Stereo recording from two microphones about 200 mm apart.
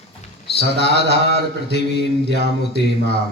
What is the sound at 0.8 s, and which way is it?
Mantra, 55° left (ahead or behind).